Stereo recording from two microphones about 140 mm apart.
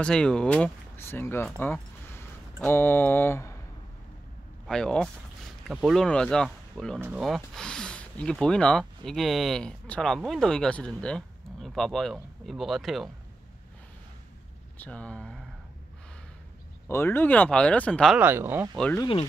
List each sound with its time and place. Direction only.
0.0 s speech: 5° left (ahead or behind)
4.6 s speech: 5° left (ahead or behind)
14.8 s speech: 10° left (ahead or behind)
16.8 s speech: 15° left (ahead or behind)
18.1 s speech: 15° right (ahead or behind)